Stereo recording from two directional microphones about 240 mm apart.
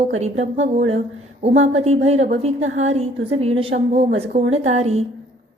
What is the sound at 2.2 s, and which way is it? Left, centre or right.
A woman's voice, right.